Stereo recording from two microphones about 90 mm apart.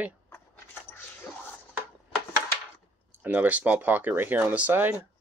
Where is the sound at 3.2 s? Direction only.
15° right (ahead or behind).